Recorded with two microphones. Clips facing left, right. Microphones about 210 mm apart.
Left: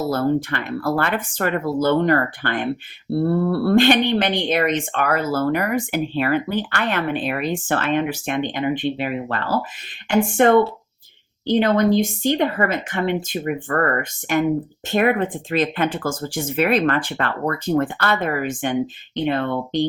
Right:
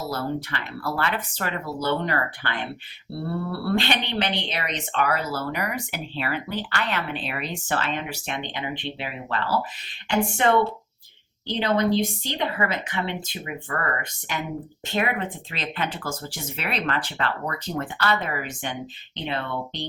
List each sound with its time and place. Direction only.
0.1 s speech: 50° left (ahead or behind)